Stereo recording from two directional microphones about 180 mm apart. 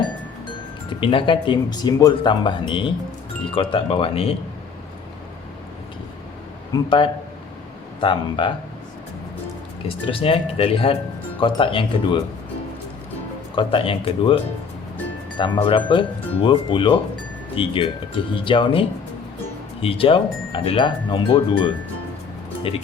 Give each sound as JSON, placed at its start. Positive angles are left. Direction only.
{"t": 0.9, "sound": "speech", "side_deg": 30}
{"t": 6.7, "sound": "speech", "side_deg": 25}
{"t": 8.0, "sound": "speech", "side_deg": 25}
{"t": 9.9, "sound": "speech", "side_deg": 30}
{"t": 13.6, "sound": "speech", "side_deg": 30}
{"t": 15.4, "sound": "speech", "side_deg": 30}